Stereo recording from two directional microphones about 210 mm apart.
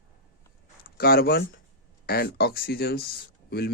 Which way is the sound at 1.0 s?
45° left (ahead or behind).